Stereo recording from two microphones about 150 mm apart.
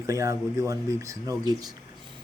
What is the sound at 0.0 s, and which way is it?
Speech, 20° right (ahead or behind).